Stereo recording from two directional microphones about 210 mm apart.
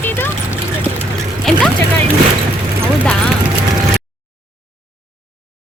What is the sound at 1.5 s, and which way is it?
Vehicle, centre (ahead or behind).